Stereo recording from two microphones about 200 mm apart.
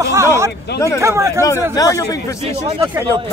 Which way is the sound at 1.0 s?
15° right (ahead or behind).